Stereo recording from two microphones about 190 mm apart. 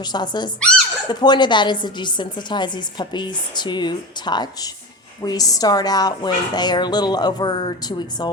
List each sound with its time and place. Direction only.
0.0 s a woman's voice: 20° left (ahead or behind)